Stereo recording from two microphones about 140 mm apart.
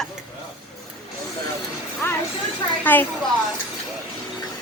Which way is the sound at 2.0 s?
15° left (ahead or behind).